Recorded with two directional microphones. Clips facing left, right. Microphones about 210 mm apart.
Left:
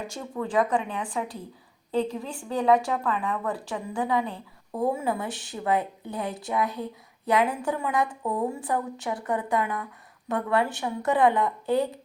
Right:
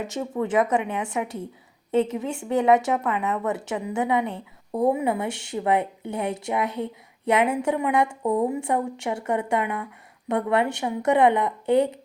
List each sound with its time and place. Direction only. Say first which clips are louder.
0.1 s a woman's voice: right 4 dB; 25° right (ahead or behind)
5.3 s speech: right 3 dB; 70° right (ahead or behind)
6.0 s a woman's voice: right 4 dB; 25° right (ahead or behind)